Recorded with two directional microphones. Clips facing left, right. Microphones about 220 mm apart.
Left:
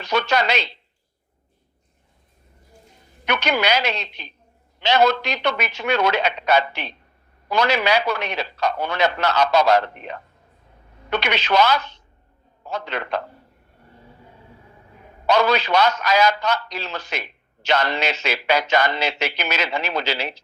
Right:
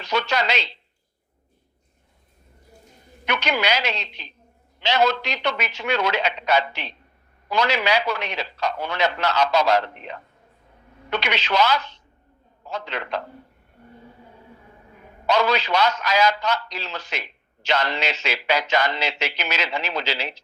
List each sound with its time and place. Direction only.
0.0 s a man's voice: 55° left (ahead or behind)
3.2 s a man's voice: 55° left (ahead or behind)
15.3 s a man's voice: 55° left (ahead or behind)